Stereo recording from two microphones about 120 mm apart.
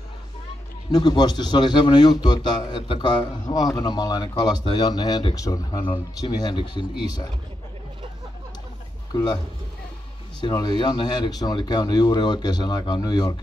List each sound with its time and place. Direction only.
0.9 s a man's voice: 35° left (ahead or behind)
9.1 s a man's voice: 35° left (ahead or behind)
10.4 s a man's voice: 35° left (ahead or behind)